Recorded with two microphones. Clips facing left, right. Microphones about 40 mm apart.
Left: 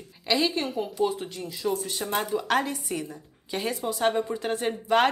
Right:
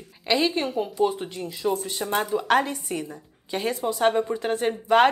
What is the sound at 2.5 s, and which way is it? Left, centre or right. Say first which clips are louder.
A woman's voice: right 4 dB; centre.